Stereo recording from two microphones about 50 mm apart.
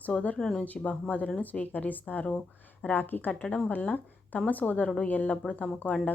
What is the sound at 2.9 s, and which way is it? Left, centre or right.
A woman's voice, left.